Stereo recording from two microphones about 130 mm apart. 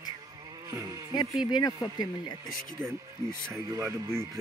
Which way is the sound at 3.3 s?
20° right (ahead or behind).